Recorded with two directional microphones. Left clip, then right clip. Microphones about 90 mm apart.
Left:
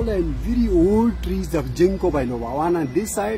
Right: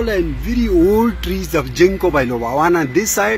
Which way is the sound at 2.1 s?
10° right (ahead or behind).